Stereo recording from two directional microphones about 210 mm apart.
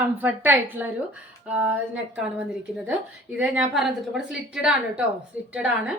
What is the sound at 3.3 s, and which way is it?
A woman's voice, 5° right (ahead or behind).